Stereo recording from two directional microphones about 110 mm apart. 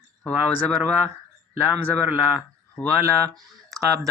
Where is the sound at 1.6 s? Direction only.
15° right (ahead or behind).